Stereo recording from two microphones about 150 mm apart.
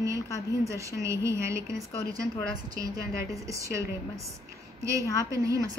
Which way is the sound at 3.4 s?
20° right (ahead or behind).